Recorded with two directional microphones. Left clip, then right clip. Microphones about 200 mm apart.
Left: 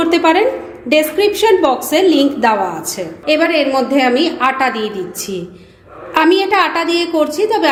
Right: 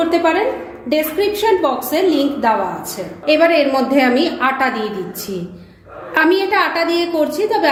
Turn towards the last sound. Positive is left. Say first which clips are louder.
# left 2 dB
turn(degrees=30)  # may be behind; listen again after turning